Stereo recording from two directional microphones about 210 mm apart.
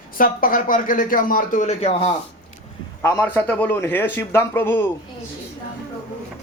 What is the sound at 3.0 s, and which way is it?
A man's voice, 10° left (ahead or behind).